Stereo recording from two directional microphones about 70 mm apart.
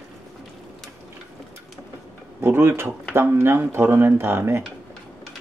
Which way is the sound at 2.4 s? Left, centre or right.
Right.